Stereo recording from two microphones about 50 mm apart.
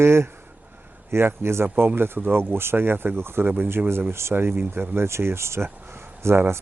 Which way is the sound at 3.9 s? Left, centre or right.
Right.